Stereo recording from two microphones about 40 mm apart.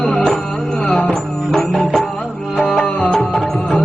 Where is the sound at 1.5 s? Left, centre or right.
Centre.